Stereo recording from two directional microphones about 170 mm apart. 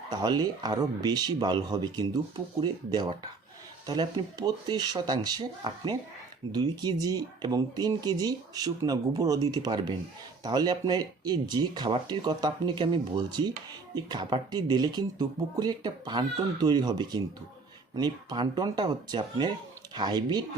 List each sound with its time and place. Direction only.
0.1 s speech: 25° right (ahead or behind)